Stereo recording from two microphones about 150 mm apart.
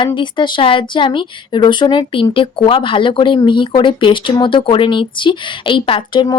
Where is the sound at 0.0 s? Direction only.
30° left (ahead or behind).